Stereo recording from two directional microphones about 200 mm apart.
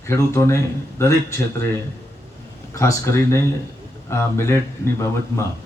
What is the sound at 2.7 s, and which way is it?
A man's voice, 15° left (ahead or behind).